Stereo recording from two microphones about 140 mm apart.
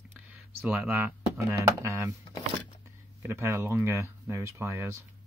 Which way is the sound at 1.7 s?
20° right (ahead or behind).